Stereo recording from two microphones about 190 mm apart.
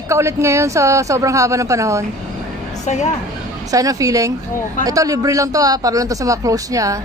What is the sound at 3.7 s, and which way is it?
Speech, 20° right (ahead or behind).